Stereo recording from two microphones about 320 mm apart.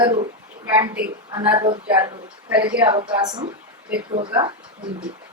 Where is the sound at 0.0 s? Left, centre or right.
Centre.